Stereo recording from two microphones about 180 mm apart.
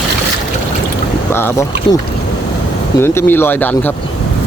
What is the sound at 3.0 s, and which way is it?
Speech, 10° left (ahead or behind).